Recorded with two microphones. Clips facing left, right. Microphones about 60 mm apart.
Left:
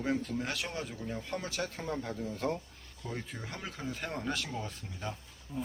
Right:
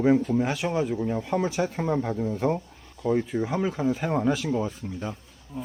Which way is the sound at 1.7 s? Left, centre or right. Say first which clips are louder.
Right 11 dB; right.